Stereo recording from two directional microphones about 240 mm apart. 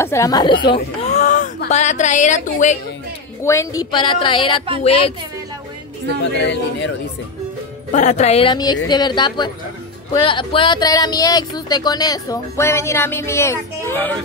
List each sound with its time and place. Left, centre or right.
0.0 s speech: centre; by 2.8 s left
3.4 s a woman's voice: centre
6.3 s speech: left
7.9 s a woman's voice: left; by 14.1 s centre